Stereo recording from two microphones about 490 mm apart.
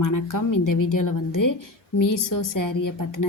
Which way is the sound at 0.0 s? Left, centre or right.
Left.